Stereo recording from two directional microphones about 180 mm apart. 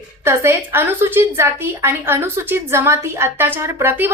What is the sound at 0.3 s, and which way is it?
A woman's voice, 15° right (ahead or behind).